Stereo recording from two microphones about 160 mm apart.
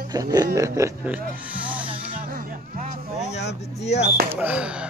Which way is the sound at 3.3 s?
90° left.